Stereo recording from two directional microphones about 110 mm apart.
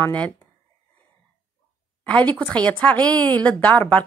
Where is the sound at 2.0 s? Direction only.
15° left (ahead or behind).